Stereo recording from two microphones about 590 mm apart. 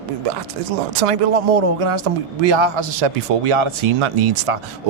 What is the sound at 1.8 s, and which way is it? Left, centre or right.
A man's voice, right.